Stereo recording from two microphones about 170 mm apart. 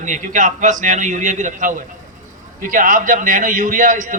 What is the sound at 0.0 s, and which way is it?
A man's voice, 50° right (ahead or behind).